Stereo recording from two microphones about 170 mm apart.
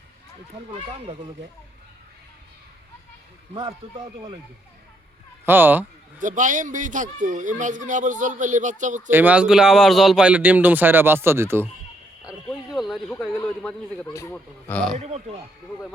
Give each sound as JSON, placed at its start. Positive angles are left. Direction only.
{"t": 0.7, "sound": "speech", "side_deg": -35}
{"t": 3.5, "sound": "speech", "side_deg": -25}
{"t": 4.0, "sound": "speech", "side_deg": -40}
{"t": 5.5, "sound": "speech", "side_deg": -10}
{"t": 6.1, "sound": "speech", "side_deg": -50}
{"t": 9.0, "sound": "speech", "side_deg": -10}
{"t": 12.2, "sound": "speech", "side_deg": 0}
{"t": 14.3, "sound": "speech", "side_deg": 5}
{"t": 14.9, "sound": "speech", "side_deg": -40}